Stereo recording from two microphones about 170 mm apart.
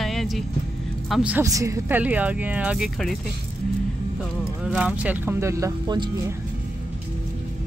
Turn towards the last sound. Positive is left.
turn(degrees=-25)  # may be behind; listen again after turning